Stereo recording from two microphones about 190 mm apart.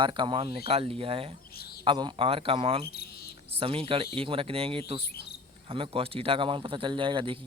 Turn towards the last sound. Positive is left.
turn(degrees=-25)  # may be behind; listen again after turning